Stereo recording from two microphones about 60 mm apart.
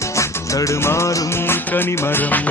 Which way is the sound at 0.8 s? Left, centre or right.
Left.